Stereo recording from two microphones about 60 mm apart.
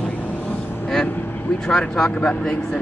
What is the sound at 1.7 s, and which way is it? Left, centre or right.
Speech, centre.